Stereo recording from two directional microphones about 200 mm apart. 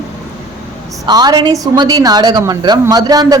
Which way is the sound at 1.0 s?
20° right (ahead or behind).